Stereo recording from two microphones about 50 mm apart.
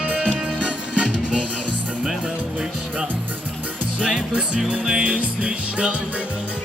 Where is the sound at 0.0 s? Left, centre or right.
Right.